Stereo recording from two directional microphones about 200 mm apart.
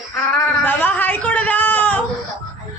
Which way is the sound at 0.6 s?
10° left (ahead or behind).